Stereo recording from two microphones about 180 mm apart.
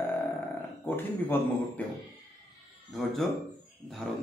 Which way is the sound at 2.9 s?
Centre (ahead or behind).